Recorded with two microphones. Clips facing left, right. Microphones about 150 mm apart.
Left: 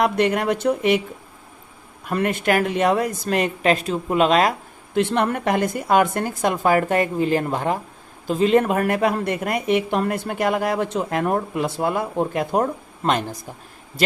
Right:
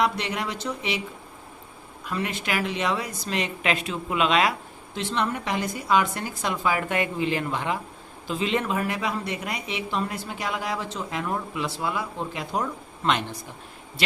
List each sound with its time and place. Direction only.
0.0 s speech: 50° left (ahead or behind)
2.0 s speech: 50° left (ahead or behind)
4.9 s speech: 55° left (ahead or behind)